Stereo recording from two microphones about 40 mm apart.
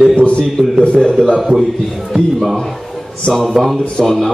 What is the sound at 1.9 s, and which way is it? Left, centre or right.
A man's voice, centre.